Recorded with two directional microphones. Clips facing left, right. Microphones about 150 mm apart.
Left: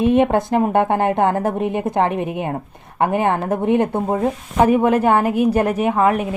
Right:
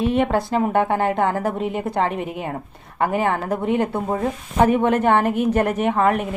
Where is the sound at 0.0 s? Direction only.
15° left (ahead or behind).